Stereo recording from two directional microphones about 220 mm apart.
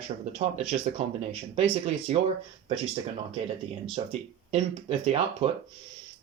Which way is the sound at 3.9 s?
25° right (ahead or behind).